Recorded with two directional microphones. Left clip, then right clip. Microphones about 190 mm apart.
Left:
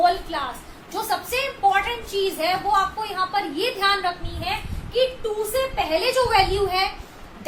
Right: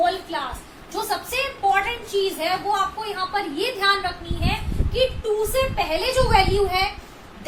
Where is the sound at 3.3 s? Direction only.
20° left (ahead or behind).